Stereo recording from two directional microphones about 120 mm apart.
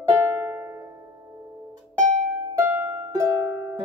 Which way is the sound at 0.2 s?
20° right (ahead or behind).